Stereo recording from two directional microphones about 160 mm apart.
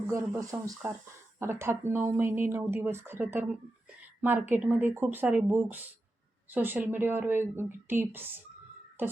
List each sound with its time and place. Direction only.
0.1 s speech: 20° right (ahead or behind)